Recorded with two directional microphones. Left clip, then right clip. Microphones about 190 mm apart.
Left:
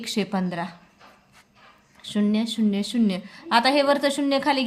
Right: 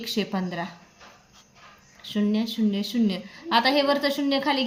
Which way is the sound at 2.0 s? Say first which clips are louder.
Left 2 dB; 25° left (ahead or behind).